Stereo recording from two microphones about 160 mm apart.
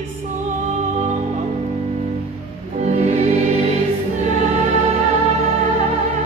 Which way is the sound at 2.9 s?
45° right (ahead or behind).